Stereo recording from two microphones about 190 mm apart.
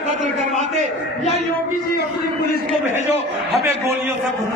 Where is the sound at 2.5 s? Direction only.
40° left (ahead or behind).